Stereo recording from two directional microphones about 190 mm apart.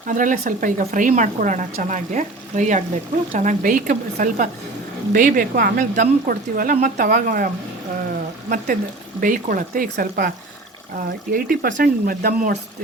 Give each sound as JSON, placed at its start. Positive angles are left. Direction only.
{"t": 0.1, "sound": "a woman's voice", "side_deg": -45}